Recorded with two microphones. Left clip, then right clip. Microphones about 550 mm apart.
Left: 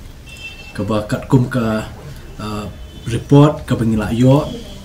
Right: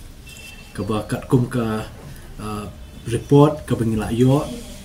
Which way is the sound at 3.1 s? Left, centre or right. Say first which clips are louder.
Left 2 dB; right.